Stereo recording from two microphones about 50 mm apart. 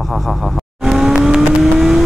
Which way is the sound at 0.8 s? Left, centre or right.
Centre.